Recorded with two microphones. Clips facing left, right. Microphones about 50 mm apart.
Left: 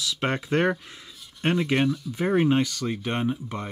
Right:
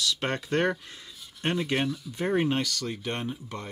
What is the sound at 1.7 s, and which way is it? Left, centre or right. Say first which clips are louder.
Speech: left 5 dB; centre.